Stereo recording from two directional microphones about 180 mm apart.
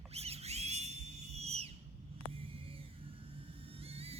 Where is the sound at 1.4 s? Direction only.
35° right (ahead or behind).